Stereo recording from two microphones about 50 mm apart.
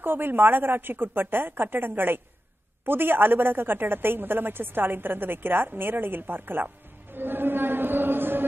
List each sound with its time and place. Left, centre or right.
0.0 s a woman's voice: right